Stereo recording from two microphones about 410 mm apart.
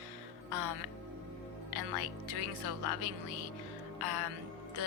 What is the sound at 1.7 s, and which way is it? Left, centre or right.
Speech, right.